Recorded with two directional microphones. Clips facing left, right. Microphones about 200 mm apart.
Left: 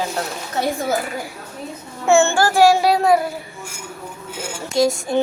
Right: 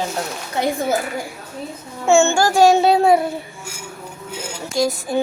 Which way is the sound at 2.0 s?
15° right (ahead or behind).